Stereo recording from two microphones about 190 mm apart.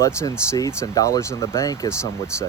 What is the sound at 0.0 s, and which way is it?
Speech, 15° left (ahead or behind).